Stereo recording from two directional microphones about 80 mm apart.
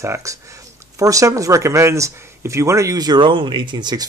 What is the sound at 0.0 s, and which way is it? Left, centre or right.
Speech, right.